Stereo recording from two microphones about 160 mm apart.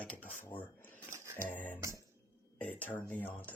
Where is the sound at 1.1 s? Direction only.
15° right (ahead or behind).